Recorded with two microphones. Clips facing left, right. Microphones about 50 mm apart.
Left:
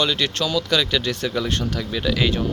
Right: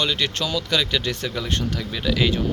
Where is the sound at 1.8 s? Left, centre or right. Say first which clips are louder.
Left 1 dB; centre.